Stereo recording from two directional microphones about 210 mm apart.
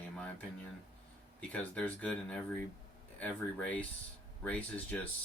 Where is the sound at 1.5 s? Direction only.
5° left (ahead or behind).